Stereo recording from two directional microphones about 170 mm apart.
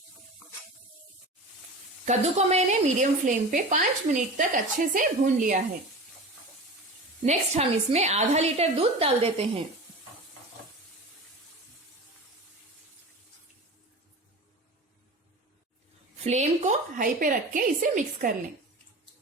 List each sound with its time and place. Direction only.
2.0 s a woman's voice: 40° right (ahead or behind)
7.3 s a woman's voice: 40° right (ahead or behind)
16.2 s a woman's voice: 40° right (ahead or behind)